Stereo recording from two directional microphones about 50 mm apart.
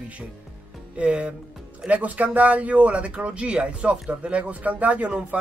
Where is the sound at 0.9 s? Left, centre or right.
Right.